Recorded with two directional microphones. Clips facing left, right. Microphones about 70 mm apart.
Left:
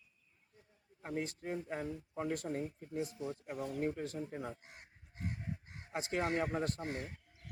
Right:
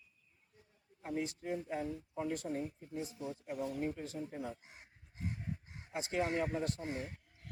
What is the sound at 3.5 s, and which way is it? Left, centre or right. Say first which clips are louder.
Speech: even; left.